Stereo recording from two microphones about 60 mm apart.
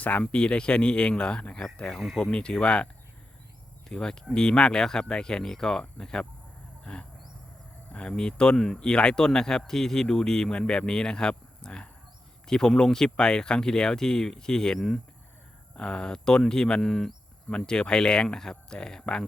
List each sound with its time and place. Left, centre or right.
0.0 s speech: left
0.3 s speech: centre
6.8 s a sound: centre
7.9 s speech: centre
17.5 s speech: centre